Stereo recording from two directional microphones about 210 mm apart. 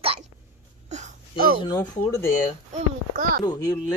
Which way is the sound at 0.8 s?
35° right (ahead or behind).